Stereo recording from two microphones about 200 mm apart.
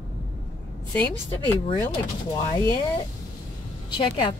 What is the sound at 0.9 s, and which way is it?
Speech, 5° left (ahead or behind).